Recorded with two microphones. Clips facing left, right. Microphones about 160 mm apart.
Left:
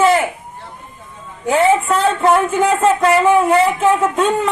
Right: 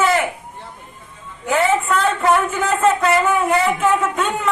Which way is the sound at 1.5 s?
30° left (ahead or behind).